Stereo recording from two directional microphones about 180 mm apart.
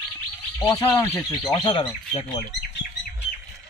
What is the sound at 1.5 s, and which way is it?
Speech, 30° left (ahead or behind).